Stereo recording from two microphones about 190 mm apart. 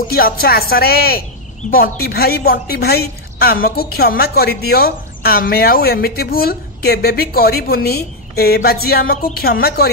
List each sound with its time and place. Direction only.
0.1 s a woman's voice: 50° left (ahead or behind)